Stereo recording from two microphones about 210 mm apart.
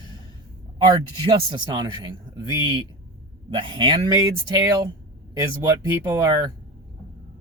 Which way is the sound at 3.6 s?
25° right (ahead or behind).